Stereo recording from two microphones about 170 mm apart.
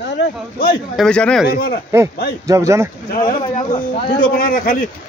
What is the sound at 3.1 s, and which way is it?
A man's voice, 55° left (ahead or behind).